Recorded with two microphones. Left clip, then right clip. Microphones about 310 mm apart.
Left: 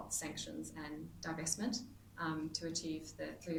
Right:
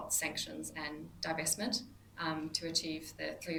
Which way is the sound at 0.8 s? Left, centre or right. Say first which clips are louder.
Right 6 dB; centre.